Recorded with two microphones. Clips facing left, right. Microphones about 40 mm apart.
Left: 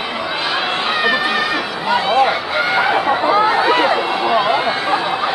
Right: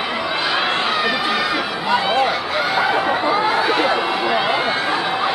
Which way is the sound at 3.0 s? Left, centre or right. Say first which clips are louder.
Left 3 dB; centre.